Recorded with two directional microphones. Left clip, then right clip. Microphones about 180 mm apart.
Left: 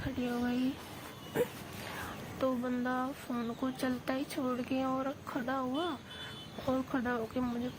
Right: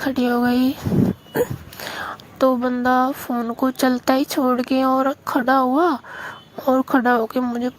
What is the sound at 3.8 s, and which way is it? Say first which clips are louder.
Speech: right 19 dB; 50° right (ahead or behind).